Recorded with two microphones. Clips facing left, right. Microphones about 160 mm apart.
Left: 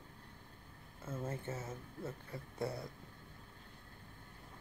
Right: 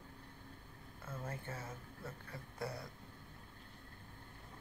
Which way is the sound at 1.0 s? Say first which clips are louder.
Left 4 dB; 25° left (ahead or behind).